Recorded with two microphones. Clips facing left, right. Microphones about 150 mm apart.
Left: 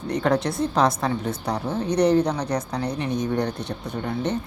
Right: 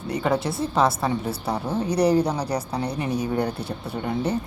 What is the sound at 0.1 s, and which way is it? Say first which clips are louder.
A woman's voice: left 1 dB; 5° right (ahead or behind).